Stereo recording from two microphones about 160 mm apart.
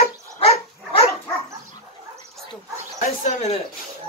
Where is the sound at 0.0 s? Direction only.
40° left (ahead or behind).